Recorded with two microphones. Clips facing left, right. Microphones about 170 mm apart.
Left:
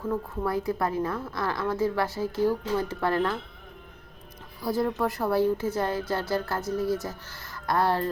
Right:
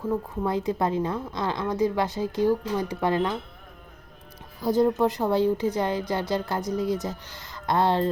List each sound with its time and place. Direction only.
0.1 s a woman's voice: 20° right (ahead or behind)
4.6 s a woman's voice: 20° right (ahead or behind)